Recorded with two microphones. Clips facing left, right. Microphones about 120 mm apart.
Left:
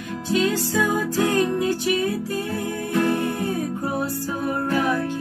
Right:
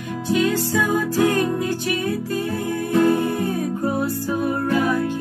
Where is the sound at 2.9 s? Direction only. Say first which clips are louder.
Right 4 dB; 15° right (ahead or behind).